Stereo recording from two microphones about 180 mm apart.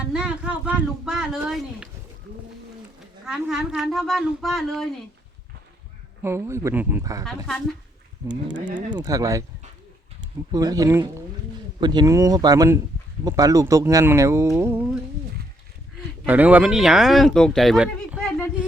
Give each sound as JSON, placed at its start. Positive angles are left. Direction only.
{"t": 0.1, "sound": "speech", "side_deg": -5}
{"t": 3.2, "sound": "speech", "side_deg": -5}
{"t": 6.2, "sound": "speech", "side_deg": -15}
{"t": 7.3, "sound": "speech", "side_deg": 5}
{"t": 8.5, "sound": "speech", "side_deg": -45}
{"t": 8.9, "sound": "speech", "side_deg": -20}
{"t": 10.5, "sound": "speech", "side_deg": -20}
{"t": 16.2, "sound": "speech", "side_deg": -10}